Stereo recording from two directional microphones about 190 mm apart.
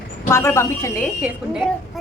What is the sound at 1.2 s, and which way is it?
Speech, centre (ahead or behind).